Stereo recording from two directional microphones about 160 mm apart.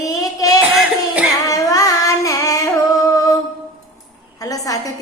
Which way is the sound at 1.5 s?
20° left (ahead or behind).